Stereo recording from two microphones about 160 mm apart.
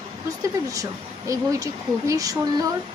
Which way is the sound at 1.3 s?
20° right (ahead or behind).